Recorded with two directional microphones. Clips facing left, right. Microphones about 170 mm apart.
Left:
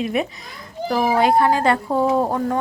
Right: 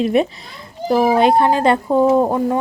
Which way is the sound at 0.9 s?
20° right (ahead or behind).